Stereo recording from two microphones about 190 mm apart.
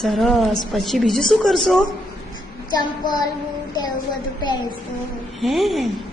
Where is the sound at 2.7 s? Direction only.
20° left (ahead or behind).